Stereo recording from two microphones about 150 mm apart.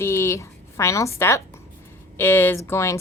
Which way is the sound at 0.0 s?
15° left (ahead or behind).